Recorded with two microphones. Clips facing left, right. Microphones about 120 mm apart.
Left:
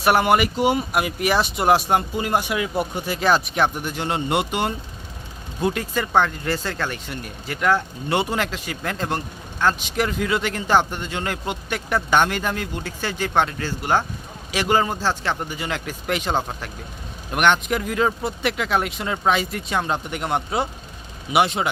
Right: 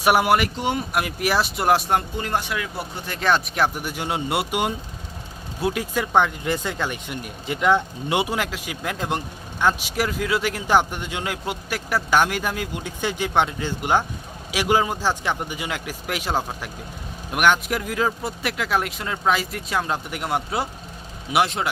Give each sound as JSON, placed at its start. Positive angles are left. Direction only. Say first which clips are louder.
{"t": 0.0, "sound": "speech", "louder": "left 1 dB", "side_deg": -10}
{"t": 3.1, "sound": "speech", "louder": "even", "side_deg": 5}
{"t": 9.9, "sound": "speech", "louder": "left 1 dB", "side_deg": 0}